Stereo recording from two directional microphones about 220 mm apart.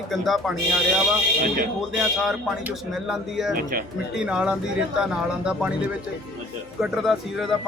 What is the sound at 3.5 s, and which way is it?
Speech, 40° right (ahead or behind).